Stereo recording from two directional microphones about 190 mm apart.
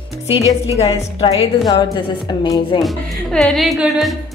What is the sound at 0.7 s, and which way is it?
A woman's voice, 30° left (ahead or behind).